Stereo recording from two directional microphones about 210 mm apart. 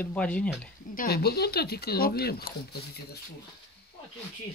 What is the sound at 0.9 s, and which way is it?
A woman's voice, 45° left (ahead or behind).